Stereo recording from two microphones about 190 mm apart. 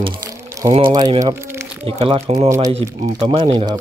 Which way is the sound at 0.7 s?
25° right (ahead or behind).